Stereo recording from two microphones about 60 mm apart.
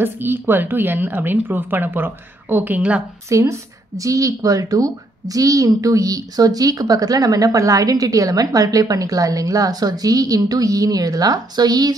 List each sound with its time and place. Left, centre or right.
0.0 s speech: right
3.3 s a woman's voice: right